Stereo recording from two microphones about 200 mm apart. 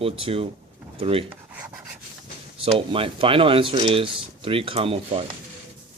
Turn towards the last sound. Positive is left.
turn(degrees=-25)  # may be behind; listen again after turning